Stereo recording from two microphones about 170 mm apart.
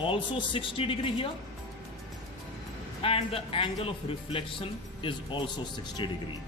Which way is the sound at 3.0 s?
35° left (ahead or behind).